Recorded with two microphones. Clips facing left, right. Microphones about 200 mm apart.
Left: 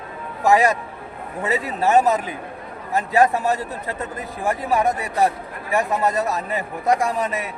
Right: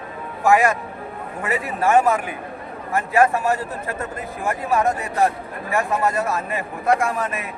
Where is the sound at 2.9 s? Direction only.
20° left (ahead or behind).